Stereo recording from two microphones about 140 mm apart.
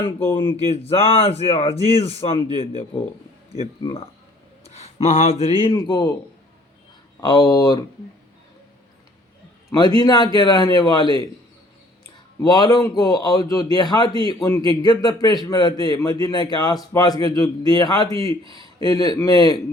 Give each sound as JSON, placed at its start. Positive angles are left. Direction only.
{"t": 0.3, "sound": "a man's voice", "side_deg": 40}
{"t": 4.7, "sound": "speech", "side_deg": 50}
{"t": 7.2, "sound": "a man's voice", "side_deg": 30}
{"t": 9.7, "sound": "speech", "side_deg": 30}
{"t": 12.4, "sound": "a man's voice", "side_deg": 25}
{"t": 18.4, "sound": "speech", "side_deg": -35}
{"t": 18.8, "sound": "a man's voice", "side_deg": 30}